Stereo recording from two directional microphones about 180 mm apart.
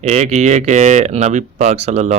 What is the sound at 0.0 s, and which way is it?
Speech, 40° right (ahead or behind).